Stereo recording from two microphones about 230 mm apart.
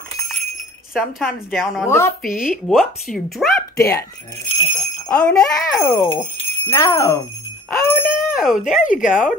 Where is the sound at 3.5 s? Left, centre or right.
Centre.